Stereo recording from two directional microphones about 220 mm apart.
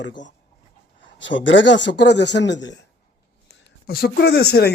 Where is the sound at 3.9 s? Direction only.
45° left (ahead or behind).